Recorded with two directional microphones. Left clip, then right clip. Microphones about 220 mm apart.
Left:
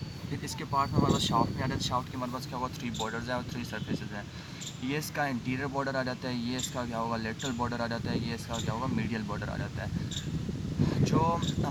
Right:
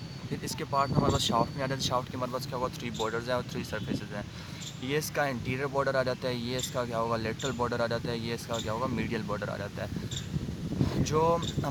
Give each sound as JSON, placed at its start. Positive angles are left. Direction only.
{"t": 0.8, "sound": "speech", "side_deg": -45}
{"t": 4.9, "sound": "speech", "side_deg": -50}
{"t": 11.0, "sound": "speech", "side_deg": -50}